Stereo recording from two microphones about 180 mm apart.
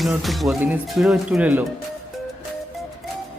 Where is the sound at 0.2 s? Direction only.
Centre (ahead or behind).